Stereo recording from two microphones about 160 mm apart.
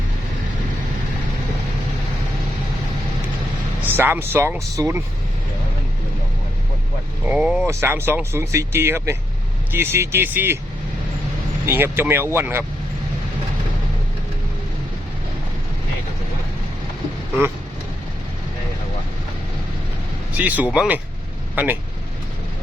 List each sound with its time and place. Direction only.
3.8 s speech: 15° right (ahead or behind)
7.3 s speech: 5° right (ahead or behind)
7.7 s speech: 15° right (ahead or behind)
11.6 s speech: 15° right (ahead or behind)
20.3 s speech: 10° right (ahead or behind)